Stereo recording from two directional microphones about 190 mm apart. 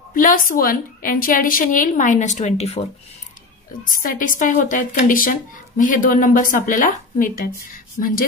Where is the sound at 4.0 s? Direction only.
45° left (ahead or behind).